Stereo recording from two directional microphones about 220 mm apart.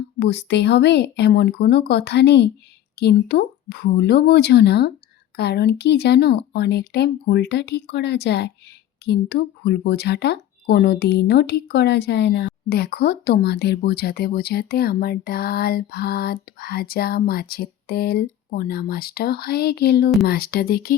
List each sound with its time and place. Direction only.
0.2 s speech: 50° left (ahead or behind)